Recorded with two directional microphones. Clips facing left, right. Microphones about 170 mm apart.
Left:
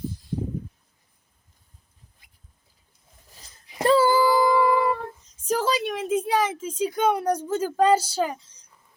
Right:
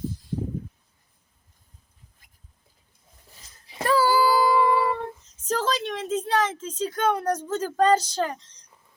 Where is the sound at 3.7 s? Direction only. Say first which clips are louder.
Left 3 dB; 25° left (ahead or behind).